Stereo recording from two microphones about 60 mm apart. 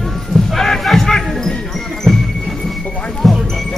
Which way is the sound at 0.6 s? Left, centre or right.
Centre.